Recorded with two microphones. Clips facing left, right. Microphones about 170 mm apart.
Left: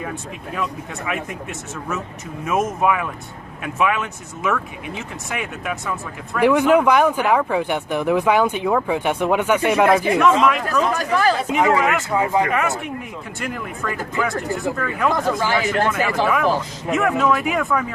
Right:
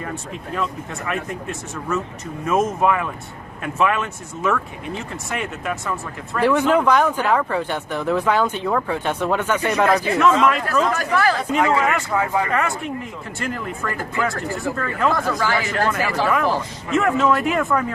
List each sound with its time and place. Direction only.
0.5 s speech: 5° left (ahead or behind)
6.4 s speech: 15° left (ahead or behind)
15.1 s speech: 20° left (ahead or behind)
16.0 s speech: centre (ahead or behind)